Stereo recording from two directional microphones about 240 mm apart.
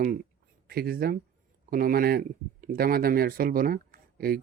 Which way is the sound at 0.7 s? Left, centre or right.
Right.